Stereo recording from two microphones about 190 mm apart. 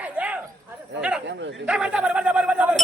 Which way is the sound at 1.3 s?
70° right (ahead or behind).